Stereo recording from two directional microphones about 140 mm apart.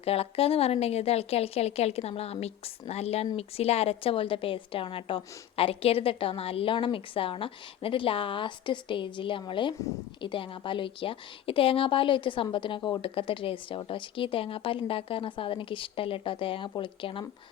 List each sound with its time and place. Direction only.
0.0 s a woman's voice: 45° left (ahead or behind)